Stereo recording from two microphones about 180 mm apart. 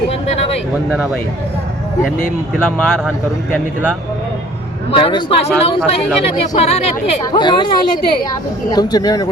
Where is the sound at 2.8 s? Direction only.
Centre (ahead or behind).